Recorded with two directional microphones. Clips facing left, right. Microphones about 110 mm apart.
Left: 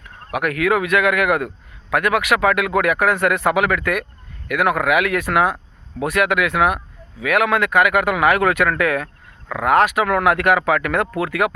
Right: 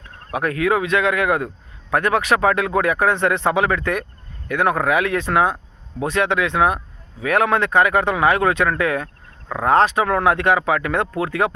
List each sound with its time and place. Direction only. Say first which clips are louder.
0.3 s a man's voice: left 1 dB; 30° right (ahead or behind)